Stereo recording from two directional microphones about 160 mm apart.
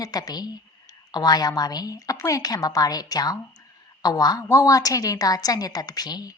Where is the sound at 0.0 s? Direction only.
25° left (ahead or behind).